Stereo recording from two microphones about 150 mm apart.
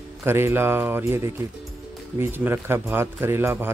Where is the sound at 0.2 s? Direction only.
15° right (ahead or behind).